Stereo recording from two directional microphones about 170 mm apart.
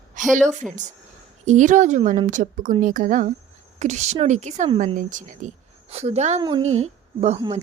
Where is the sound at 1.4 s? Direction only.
45° right (ahead or behind).